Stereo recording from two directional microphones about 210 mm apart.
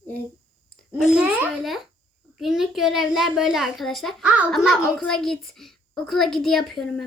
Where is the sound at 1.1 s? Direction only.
5° right (ahead or behind).